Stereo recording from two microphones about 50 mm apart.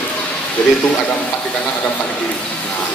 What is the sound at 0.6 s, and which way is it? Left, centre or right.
Speech, centre.